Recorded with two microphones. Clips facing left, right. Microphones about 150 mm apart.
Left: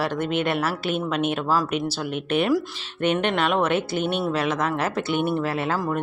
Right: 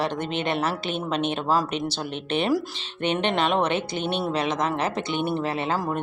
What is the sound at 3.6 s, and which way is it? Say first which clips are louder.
Speech: left 2 dB; 10° left (ahead or behind).